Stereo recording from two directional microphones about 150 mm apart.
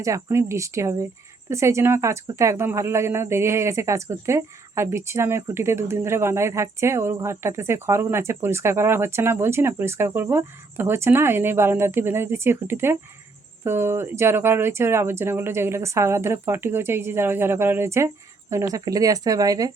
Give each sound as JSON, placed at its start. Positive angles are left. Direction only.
{"t": 0.0, "sound": "speech", "side_deg": -20}